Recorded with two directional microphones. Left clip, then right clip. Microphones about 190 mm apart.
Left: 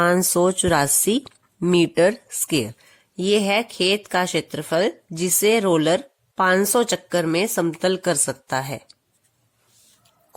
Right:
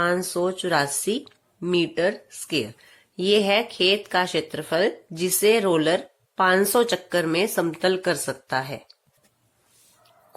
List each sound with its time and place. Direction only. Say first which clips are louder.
0.0 s speech: left 5 dB; 45° left (ahead or behind)